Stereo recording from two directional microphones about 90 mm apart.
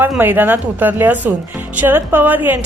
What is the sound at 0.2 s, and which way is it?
A woman's voice, 20° right (ahead or behind).